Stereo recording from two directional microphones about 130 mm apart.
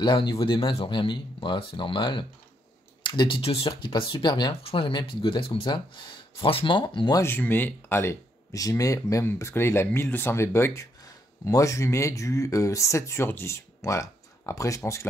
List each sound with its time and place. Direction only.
0.0 s speech: 35° left (ahead or behind)
7.2 s speech: 15° left (ahead or behind)